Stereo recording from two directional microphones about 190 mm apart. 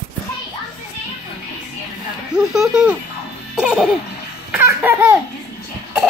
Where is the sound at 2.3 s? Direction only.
5° right (ahead or behind).